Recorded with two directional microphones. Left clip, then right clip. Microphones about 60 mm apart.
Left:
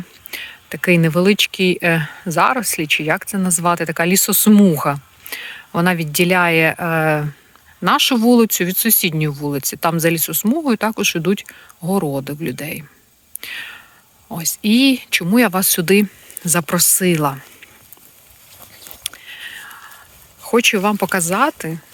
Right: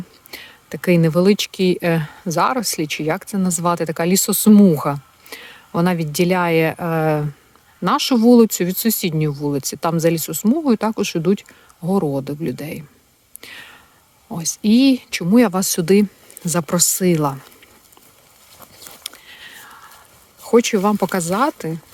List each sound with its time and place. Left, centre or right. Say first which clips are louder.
0.3 s speech: left 5 dB; centre
3.6 s speech: left 2 dB; centre
4.6 s speech: left 1 dB; right
13.4 s whispering: left 8 dB; right
14.3 s speech: left 1 dB; right
18.6 s a sound: even; centre
19.0 s whispering: left 7 dB; right
19.6 s whispering: left 4 dB; right
20.4 s speech: left 1 dB; right